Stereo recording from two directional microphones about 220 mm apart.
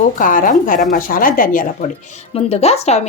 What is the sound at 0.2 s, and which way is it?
Speech, 35° left (ahead or behind).